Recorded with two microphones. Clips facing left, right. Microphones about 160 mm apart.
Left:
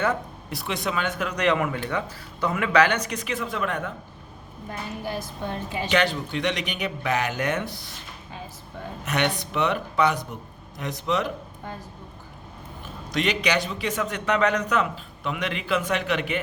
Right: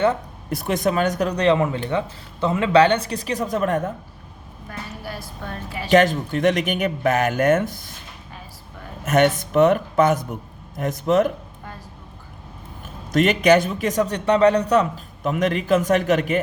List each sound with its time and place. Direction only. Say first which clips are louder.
0.5 s speech: right 7 dB; 45° right (ahead or behind)
5.0 s a woman's voice: left 4 dB; 20° left (ahead or behind)
5.9 s a man's voice: right 8 dB; 45° right (ahead or behind)
9.0 s a man's voice: right 8 dB; 45° right (ahead or behind)
13.1 s a man's voice: right 9 dB; 50° right (ahead or behind)